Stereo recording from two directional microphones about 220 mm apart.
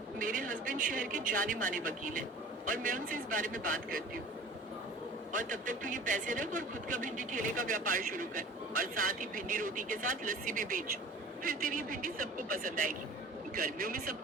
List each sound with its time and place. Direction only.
0.2 s speech: 40° right (ahead or behind)
5.3 s speech: 35° right (ahead or behind)